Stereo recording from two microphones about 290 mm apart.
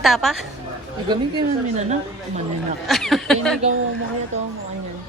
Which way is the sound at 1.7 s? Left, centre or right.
Right.